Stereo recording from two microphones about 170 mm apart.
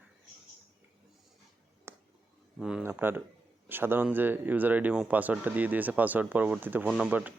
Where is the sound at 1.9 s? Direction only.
15° right (ahead or behind).